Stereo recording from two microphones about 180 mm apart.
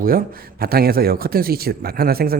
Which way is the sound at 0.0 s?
55° right (ahead or behind).